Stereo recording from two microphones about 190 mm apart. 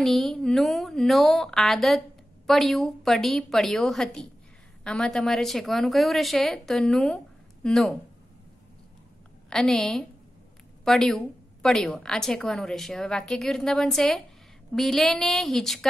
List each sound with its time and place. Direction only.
0.0 s a woman's voice: centre (ahead or behind)
9.5 s a woman's voice: centre (ahead or behind)